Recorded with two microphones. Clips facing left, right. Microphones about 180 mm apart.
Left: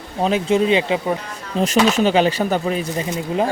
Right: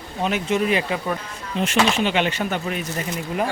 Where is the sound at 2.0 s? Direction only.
40° left (ahead or behind).